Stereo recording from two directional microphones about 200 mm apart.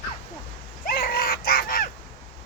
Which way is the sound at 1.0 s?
50° left (ahead or behind).